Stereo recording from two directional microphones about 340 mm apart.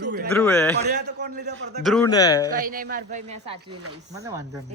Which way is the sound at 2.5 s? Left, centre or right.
Right.